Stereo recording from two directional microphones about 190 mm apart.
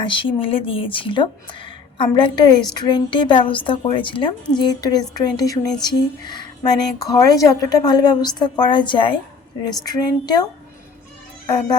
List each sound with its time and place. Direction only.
0.0 s speech: 25° left (ahead or behind)
11.4 s speech: 20° left (ahead or behind)